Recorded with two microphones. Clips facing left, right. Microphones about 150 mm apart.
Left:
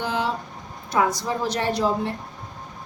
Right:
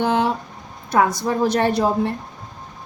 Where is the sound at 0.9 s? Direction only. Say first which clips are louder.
Right 4 dB; 55° right (ahead or behind).